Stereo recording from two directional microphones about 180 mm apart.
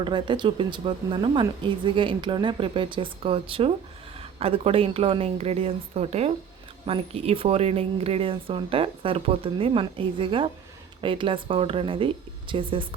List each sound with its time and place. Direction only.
0.0 s speech: 25° right (ahead or behind)